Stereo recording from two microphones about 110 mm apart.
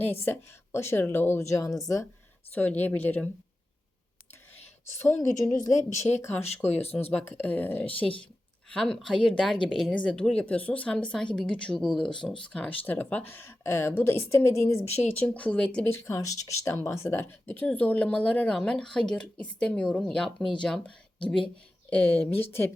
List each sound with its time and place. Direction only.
0.0 s speech: 20° left (ahead or behind)
2.5 s speech: 15° left (ahead or behind)
5.0 s speech: 25° left (ahead or behind)
5.9 s speech: 90° left
6.7 s speech: 70° left (ahead or behind)
7.1 s speech: 10° left (ahead or behind)
8.7 s speech: 5° left (ahead or behind); by 14.8 s 25° left (ahead or behind)
15.0 s speech: 15° left (ahead or behind)
15.9 s speech: 25° left (ahead or behind); by 20.9 s 5° left (ahead or behind)
21.8 s speech: 15° left (ahead or behind)